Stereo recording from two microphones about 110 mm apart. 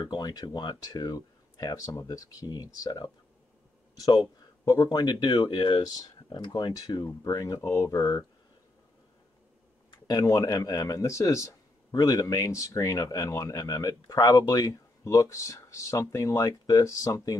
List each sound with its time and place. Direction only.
0.0 s speech: 40° left (ahead or behind)
9.8 s speech: 35° left (ahead or behind)